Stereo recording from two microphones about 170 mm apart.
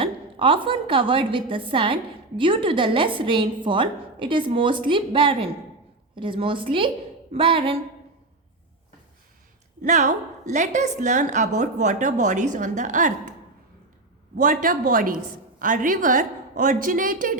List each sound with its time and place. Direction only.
0.0 s a woman's voice: 30° right (ahead or behind)
9.8 s a woman's voice: 45° right (ahead or behind)
14.3 s a woman's voice: 55° right (ahead or behind)